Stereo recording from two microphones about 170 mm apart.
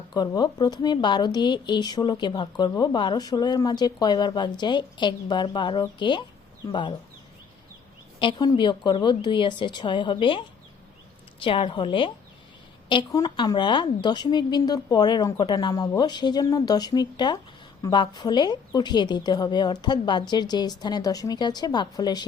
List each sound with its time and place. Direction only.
0.1 s speech: 25° left (ahead or behind)
8.2 s a woman's voice: 25° left (ahead or behind)